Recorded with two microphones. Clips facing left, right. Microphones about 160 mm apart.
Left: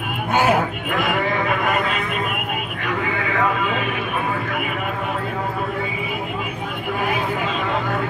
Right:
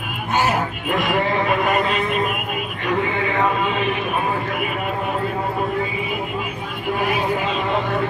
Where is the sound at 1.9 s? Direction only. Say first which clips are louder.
Right 3 dB; 35° right (ahead or behind).